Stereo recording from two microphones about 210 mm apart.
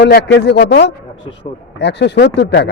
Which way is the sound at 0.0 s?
55° left (ahead or behind).